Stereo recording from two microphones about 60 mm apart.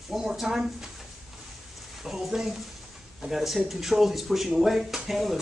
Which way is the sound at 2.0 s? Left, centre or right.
Centre.